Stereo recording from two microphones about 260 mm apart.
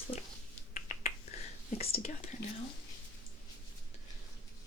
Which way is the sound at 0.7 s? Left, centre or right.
Left.